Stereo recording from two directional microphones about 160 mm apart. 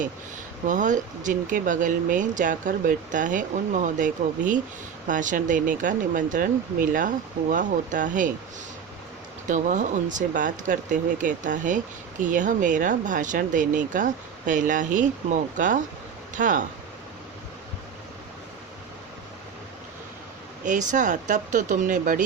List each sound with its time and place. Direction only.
0.7 s speech: 50° right (ahead or behind)
9.5 s speech: 50° right (ahead or behind)
20.7 s speech: 50° right (ahead or behind)